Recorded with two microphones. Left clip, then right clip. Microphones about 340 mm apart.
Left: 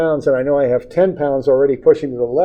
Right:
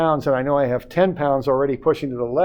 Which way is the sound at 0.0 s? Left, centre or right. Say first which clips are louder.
Left 4 dB; right.